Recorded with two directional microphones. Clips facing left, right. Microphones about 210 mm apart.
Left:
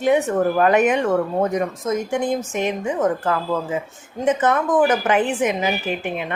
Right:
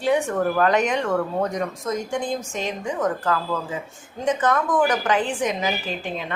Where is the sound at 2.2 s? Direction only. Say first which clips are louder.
Left 5 dB; 60° left (ahead or behind).